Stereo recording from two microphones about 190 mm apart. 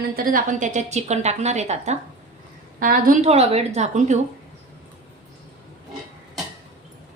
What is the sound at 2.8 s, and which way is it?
A woman's voice, 45° right (ahead or behind).